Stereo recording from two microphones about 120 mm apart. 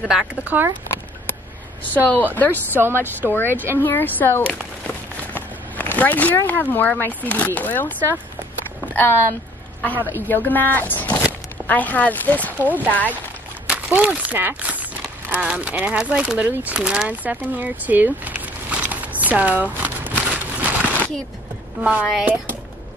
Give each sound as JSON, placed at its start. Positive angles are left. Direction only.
{"t": 0.5, "sound": "speech", "side_deg": -15}
{"t": 2.0, "sound": "speech", "side_deg": 15}
{"t": 2.7, "sound": "a woman's voice", "side_deg": -20}
{"t": 3.3, "sound": "speech", "side_deg": 15}
{"t": 13.7, "sound": "a sound", "side_deg": -15}
{"t": 21.8, "sound": "speech", "side_deg": -5}